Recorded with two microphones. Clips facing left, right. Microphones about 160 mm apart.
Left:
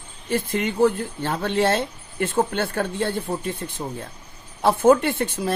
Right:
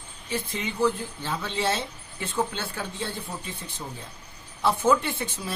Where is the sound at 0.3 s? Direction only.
55° left (ahead or behind).